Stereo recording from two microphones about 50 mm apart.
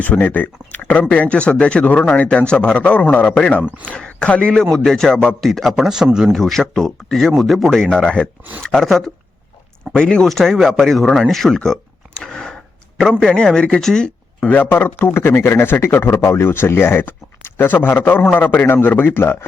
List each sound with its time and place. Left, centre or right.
0.0 s speech: left
4.8 s speech: centre
5.5 s speech: centre
5.7 s speech: centre
6.3 s speech: centre
7.8 s speech: centre
9.9 s speech: centre
10.2 s speech: centre
12.2 s a sound: centre
13.0 s speech: centre
14.5 s a man's voice: left
18.3 s a man's voice: left